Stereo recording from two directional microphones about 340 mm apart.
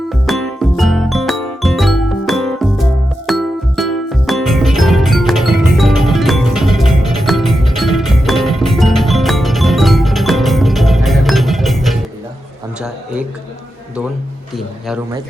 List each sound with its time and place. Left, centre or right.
0.1 s music: centre